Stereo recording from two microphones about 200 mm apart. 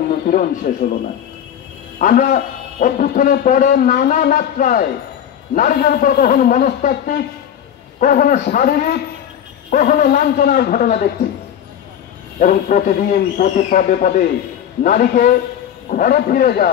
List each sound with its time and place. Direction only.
0.3 s a man's voice: 40° left (ahead or behind)
2.0 s a man's voice: 40° left (ahead or behind)
12.4 s a man's voice: 40° left (ahead or behind)